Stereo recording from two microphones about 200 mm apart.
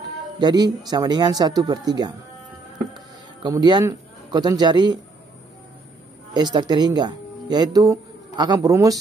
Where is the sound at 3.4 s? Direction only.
20° right (ahead or behind).